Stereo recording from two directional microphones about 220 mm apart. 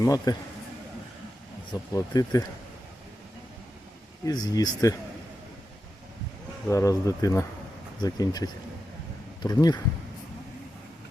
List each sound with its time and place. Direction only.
0.0 s speech: 15° left (ahead or behind)
1.9 s speech: 15° left (ahead or behind)
4.3 s speech: 15° left (ahead or behind)
6.7 s speech: 15° left (ahead or behind)